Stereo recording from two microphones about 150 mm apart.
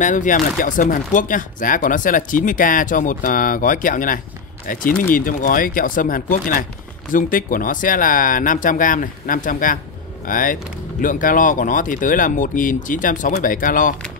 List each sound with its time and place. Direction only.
0.0 s speech: 60° left (ahead or behind)